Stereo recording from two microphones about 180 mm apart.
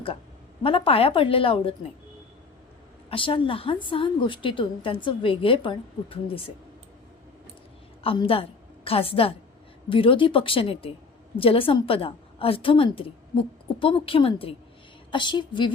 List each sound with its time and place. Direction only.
0.6 s a woman's voice: 30° left (ahead or behind)
3.1 s a woman's voice: 30° left (ahead or behind)
8.0 s a woman's voice: 30° left (ahead or behind)